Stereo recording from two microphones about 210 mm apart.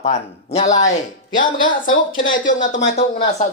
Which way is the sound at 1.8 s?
65° left (ahead or behind).